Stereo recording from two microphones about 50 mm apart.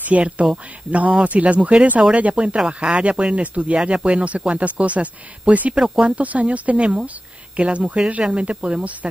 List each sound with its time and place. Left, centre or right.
0.0 s speech: right